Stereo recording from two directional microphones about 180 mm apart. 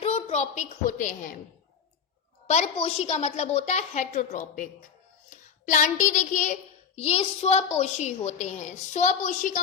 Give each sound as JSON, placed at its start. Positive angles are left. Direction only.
{"t": 0.0, "sound": "a woman's voice", "side_deg": 35}
{"t": 2.5, "sound": "child singing", "side_deg": 35}